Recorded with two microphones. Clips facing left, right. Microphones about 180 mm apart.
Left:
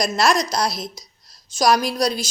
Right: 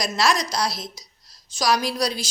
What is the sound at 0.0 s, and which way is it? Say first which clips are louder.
A woman's voice: left 3 dB; 45° left (ahead or behind).